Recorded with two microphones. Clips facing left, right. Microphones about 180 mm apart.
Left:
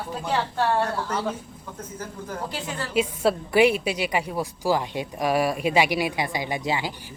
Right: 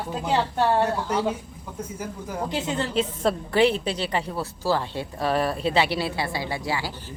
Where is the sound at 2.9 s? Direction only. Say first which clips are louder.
Left 5 dB; 10° left (ahead or behind).